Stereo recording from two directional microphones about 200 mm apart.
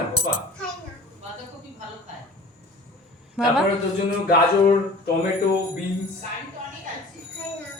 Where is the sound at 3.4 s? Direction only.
5° right (ahead or behind).